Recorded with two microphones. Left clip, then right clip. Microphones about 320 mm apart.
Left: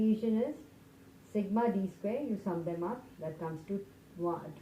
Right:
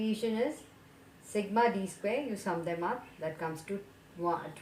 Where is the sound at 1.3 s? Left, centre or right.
Centre.